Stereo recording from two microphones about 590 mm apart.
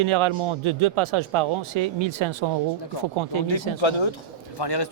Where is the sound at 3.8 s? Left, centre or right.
Left.